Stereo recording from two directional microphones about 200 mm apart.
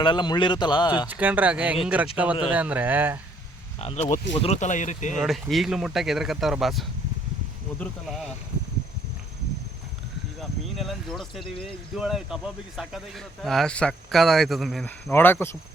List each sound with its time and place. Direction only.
0.0 s speech: 20° left (ahead or behind)
1.0 s speech: 10° right (ahead or behind)
3.8 s speech: 30° left (ahead or behind)
5.2 s speech: centre (ahead or behind)
10.8 s speech: centre (ahead or behind)
15.1 s speech: 10° left (ahead or behind)